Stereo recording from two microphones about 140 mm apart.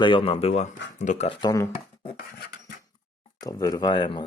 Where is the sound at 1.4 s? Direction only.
25° left (ahead or behind).